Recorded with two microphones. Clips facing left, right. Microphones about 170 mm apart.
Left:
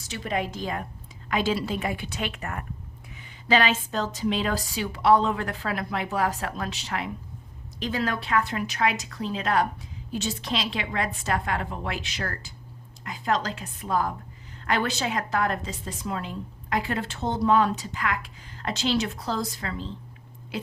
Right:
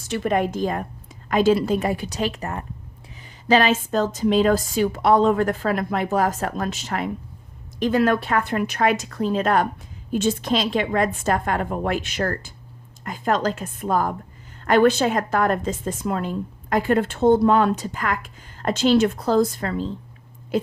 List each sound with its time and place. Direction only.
0.0 s a woman's voice: 50° right (ahead or behind)